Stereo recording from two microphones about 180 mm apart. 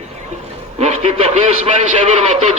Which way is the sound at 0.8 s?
35° right (ahead or behind).